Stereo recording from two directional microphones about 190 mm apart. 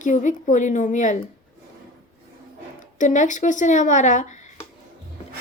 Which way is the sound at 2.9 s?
40° left (ahead or behind).